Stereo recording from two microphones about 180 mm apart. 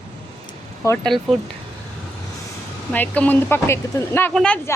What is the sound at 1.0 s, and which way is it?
Speech, centre (ahead or behind).